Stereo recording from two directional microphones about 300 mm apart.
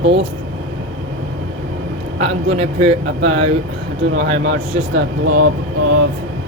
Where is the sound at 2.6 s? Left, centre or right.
Centre.